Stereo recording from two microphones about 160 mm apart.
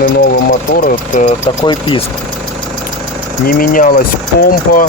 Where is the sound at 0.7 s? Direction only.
55° left (ahead or behind).